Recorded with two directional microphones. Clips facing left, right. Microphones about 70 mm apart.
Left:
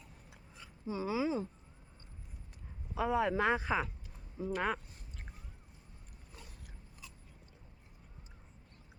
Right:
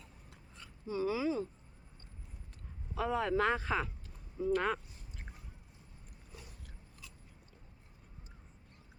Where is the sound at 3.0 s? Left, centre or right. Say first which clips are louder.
Left 1 dB; centre.